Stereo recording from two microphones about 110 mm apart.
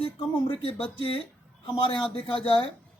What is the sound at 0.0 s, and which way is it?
A woman's voice, 55° left (ahead or behind).